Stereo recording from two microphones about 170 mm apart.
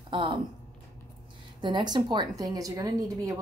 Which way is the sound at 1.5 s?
25° right (ahead or behind).